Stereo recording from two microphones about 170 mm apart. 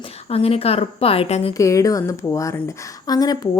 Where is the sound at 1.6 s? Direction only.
20° left (ahead or behind).